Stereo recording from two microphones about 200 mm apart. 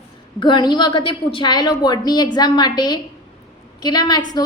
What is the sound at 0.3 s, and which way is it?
A woman's voice, 20° left (ahead or behind).